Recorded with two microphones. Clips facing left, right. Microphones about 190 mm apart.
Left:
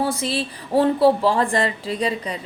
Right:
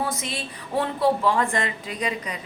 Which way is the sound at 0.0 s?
30° left (ahead or behind).